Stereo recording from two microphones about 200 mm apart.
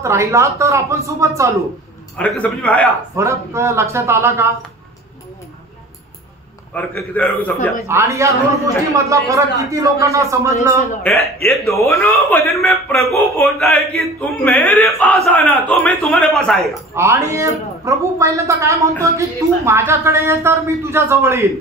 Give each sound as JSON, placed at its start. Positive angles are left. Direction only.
{"t": 0.0, "sound": "a man's voice", "side_deg": -15}
{"t": 2.1, "sound": "a man's voice", "side_deg": 5}
{"t": 3.2, "sound": "a man's voice", "side_deg": -15}
{"t": 6.7, "sound": "a man's voice", "side_deg": 10}
{"t": 7.8, "sound": "a man's voice", "side_deg": -15}
{"t": 11.5, "sound": "a man's voice", "side_deg": 0}
{"t": 11.8, "sound": "a man's voice", "side_deg": 15}
{"t": 13.7, "sound": "a man's voice", "side_deg": -50}
{"t": 14.4, "sound": "a man's voice", "side_deg": 10}
{"t": 16.9, "sound": "a man's voice", "side_deg": -15}